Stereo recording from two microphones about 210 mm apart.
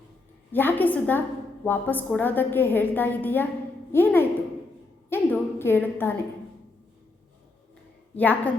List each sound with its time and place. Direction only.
0.5 s a woman's voice: 10° left (ahead or behind)
5.0 s a sound: 10° left (ahead or behind)
8.1 s a woman's voice: 10° left (ahead or behind)